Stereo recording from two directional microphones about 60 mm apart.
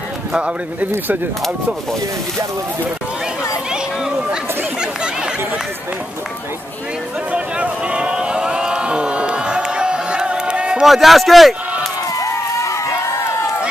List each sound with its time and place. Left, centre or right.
0.3 s speech: centre
3.7 s chatter: centre
7.3 s vehicle: centre
10.8 s speech: centre
12.2 s run: left